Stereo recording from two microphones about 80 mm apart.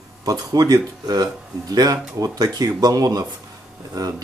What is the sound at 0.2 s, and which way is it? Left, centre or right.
Speech, right.